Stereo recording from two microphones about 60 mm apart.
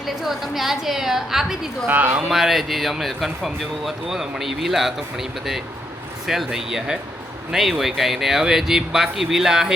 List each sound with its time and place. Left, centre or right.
0.2 s speech: centre
1.9 s speech: right
2.3 s speech: centre